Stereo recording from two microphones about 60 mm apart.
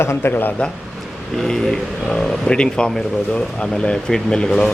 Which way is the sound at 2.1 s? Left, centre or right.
Centre.